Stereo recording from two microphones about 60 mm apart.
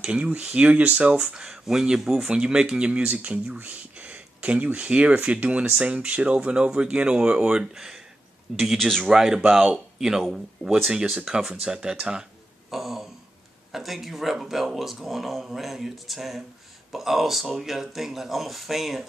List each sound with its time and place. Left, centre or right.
0.0 s speech: right
3.5 s a sound: right
4.7 s speech: centre
8.5 s speech: centre
9.0 s speech: centre
12.7 s a sound: centre
13.7 s speech: centre